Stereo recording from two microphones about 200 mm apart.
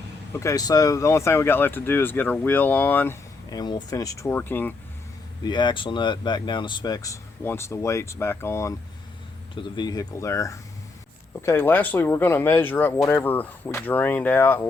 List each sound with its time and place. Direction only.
0.3 s speech: 15° left (ahead or behind)
5.5 s speech: 20° left (ahead or behind)